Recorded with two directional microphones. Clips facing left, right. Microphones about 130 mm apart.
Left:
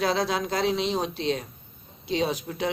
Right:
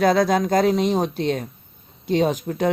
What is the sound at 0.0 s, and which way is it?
Speech, 45° right (ahead or behind).